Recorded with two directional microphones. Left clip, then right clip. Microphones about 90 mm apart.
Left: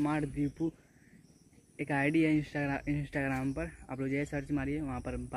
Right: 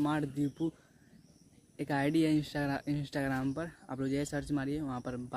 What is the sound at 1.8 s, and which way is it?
Speech, 25° right (ahead or behind).